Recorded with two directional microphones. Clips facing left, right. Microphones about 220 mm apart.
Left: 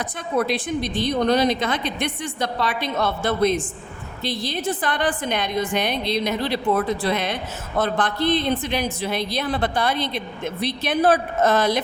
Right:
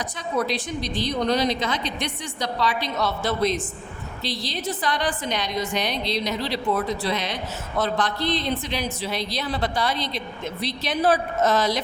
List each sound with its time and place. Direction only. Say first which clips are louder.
0.0 s a man's voice: left 3 dB; 55° left (ahead or behind)